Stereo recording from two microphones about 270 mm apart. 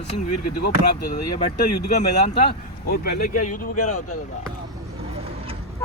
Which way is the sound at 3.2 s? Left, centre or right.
Left.